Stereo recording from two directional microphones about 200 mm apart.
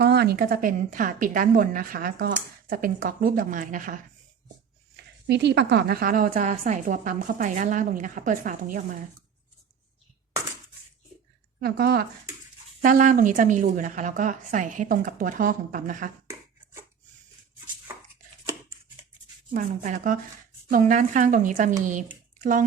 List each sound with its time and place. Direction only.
0.0 s a woman's voice: 50° right (ahead or behind)
5.2 s a woman's voice: 55° right (ahead or behind)
11.6 s a woman's voice: 50° right (ahead or behind)
12.8 s a woman's voice: 40° right (ahead or behind)
19.5 s a woman's voice: 40° right (ahead or behind)